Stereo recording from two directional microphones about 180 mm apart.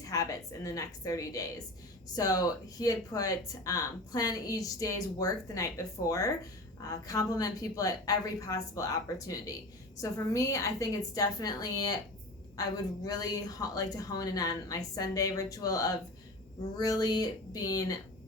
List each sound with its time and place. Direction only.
0.0 s speech: 20° left (ahead or behind)